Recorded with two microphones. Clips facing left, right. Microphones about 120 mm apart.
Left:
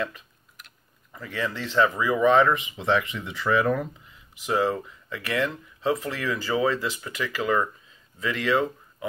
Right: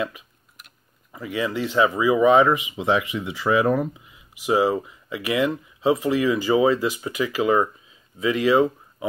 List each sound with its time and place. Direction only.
1.1 s speech: 15° right (ahead or behind)